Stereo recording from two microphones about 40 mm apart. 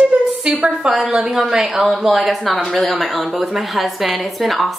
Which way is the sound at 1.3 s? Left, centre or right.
Centre.